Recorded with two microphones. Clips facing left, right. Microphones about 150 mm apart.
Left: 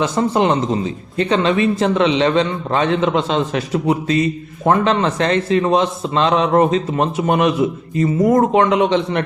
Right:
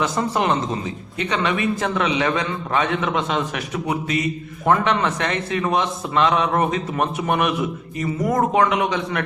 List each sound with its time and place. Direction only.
0.0 s a man's voice: 25° left (ahead or behind)